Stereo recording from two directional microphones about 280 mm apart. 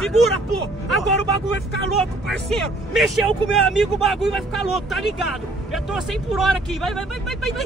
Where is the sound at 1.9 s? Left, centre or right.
Centre.